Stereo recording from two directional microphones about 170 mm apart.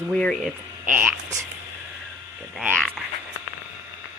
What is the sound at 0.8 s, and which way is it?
Speech, 10° right (ahead or behind).